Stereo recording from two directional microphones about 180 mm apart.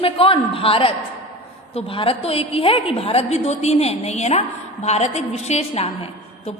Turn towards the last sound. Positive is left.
turn(degrees=35)  # may be behind; listen again after turning